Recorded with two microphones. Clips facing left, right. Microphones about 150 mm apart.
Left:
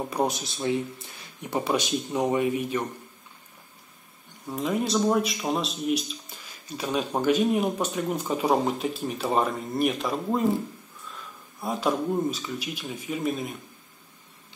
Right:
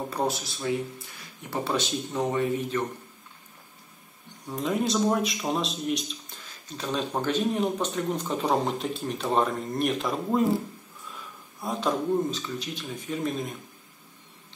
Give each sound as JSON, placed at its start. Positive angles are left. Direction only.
{"t": 0.1, "sound": "speech", "side_deg": 20}
{"t": 4.5, "sound": "speech", "side_deg": 0}
{"t": 11.6, "sound": "speech", "side_deg": 10}